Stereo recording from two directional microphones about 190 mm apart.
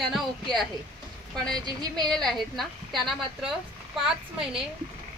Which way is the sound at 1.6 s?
20° right (ahead or behind).